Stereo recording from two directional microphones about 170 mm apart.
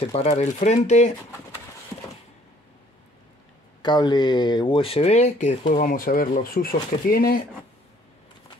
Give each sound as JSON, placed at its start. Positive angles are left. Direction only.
{"t": 0.1, "sound": "speech", "side_deg": 40}
{"t": 3.8, "sound": "speech", "side_deg": 25}